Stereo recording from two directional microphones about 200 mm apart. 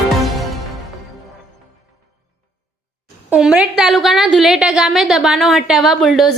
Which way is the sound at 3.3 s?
5° right (ahead or behind).